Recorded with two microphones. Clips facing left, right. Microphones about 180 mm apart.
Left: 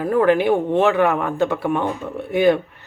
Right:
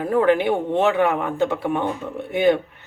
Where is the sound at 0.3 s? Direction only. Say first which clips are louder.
Left 2 dB; 20° right (ahead or behind).